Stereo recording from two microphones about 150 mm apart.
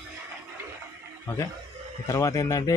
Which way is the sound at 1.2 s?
20° left (ahead or behind).